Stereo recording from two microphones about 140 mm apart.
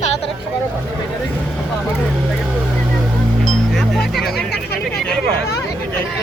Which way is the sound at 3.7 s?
Centre (ahead or behind).